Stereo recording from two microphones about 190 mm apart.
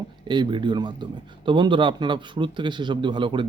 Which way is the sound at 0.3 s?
25° right (ahead or behind).